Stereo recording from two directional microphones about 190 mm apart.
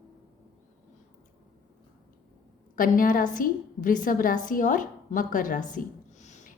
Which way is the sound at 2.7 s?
45° left (ahead or behind).